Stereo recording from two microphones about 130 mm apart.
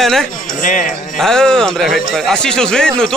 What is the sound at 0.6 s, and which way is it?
Speech, 90° left.